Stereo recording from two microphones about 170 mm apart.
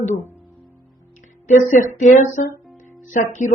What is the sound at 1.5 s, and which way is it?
Speech, 50° left (ahead or behind).